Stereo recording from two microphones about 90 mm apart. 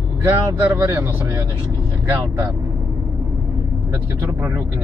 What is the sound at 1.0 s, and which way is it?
Speech, 25° right (ahead or behind).